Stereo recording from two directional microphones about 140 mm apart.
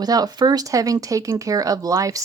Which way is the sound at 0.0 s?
25° right (ahead or behind).